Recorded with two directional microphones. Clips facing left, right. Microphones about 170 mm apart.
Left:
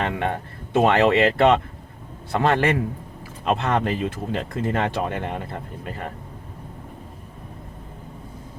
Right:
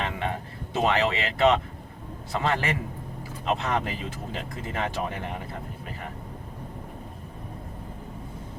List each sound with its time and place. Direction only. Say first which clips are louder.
0.0 s speech: left 5 dB; 55° left (ahead or behind)